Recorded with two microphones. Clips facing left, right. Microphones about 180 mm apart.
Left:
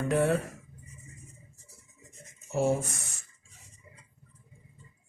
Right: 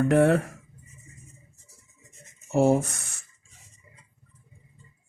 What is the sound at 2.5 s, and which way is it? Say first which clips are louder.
Speech: right 6 dB; 65° right (ahead or behind).